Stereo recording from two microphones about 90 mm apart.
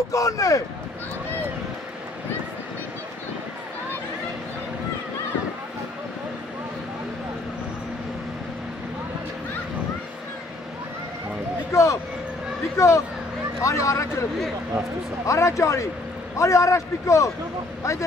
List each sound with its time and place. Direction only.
0.1 s a man's voice: 40° left (ahead or behind)
11.7 s a man's voice: 35° left (ahead or behind)
15.2 s a man's voice: 35° left (ahead or behind)